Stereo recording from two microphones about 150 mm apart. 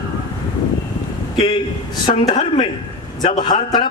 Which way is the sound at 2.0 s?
30° left (ahead or behind).